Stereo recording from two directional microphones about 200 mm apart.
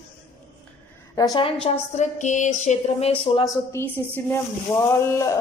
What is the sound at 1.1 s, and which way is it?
A woman's voice, 20° left (ahead or behind).